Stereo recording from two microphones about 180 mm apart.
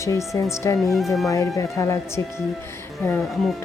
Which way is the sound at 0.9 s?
Centre (ahead or behind).